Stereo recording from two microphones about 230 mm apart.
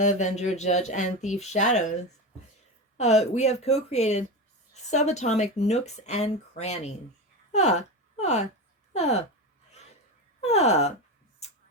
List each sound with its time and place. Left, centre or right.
0.0 s speech: left
10.4 s speech: left